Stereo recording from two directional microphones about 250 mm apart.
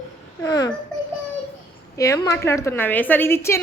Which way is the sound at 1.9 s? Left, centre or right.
Centre.